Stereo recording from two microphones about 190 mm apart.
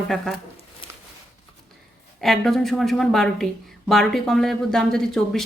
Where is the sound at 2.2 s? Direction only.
Centre (ahead or behind).